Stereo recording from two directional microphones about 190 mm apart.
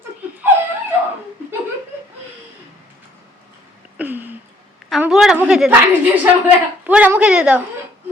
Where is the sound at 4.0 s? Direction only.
10° right (ahead or behind).